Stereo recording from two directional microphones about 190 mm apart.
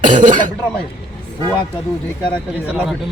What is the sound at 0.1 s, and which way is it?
Speech, 40° right (ahead or behind).